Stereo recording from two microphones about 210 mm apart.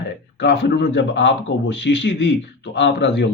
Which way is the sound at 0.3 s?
55° left (ahead or behind).